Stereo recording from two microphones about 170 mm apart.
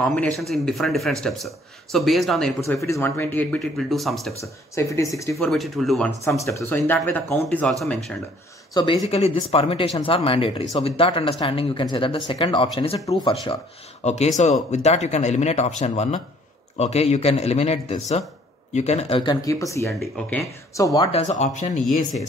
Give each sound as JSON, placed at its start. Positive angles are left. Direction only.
{"t": 0.0, "sound": "speech", "side_deg": 10}
{"t": 2.8, "sound": "speech", "side_deg": 15}
{"t": 4.4, "sound": "speech", "side_deg": 15}
{"t": 5.4, "sound": "speech", "side_deg": 0}
{"t": 6.4, "sound": "speech", "side_deg": 15}
{"t": 8.7, "sound": "speech", "side_deg": 25}
{"t": 9.1, "sound": "speech", "side_deg": 35}
{"t": 13.0, "sound": "speech", "side_deg": 20}
{"t": 14.0, "sound": "speech", "side_deg": 40}
{"t": 19.4, "sound": "speech", "side_deg": 20}
{"t": 19.9, "sound": "speech", "side_deg": 5}
{"t": 20.7, "sound": "speech", "side_deg": 20}
{"t": 21.1, "sound": "speech", "side_deg": 40}